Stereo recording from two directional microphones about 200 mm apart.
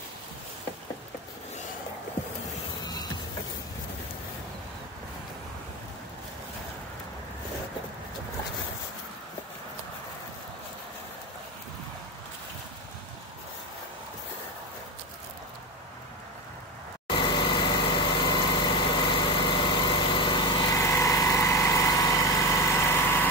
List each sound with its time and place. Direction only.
2.8 s music: 20° left (ahead or behind)
17.1 s light engine: 25° left (ahead or behind)